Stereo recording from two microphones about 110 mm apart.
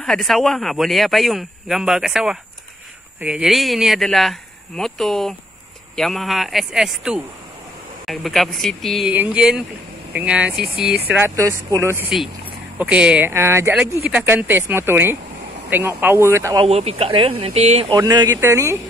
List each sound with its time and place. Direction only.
0.0 s speech: 5° left (ahead or behind)
9.1 s speech: 15° right (ahead or behind)
11.1 s speech: 20° right (ahead or behind)
12.7 s speech: 10° right (ahead or behind)
13.3 s speech: 25° right (ahead or behind)
16.6 s speech: 70° right (ahead or behind)
17.9 s speech: 35° right (ahead or behind)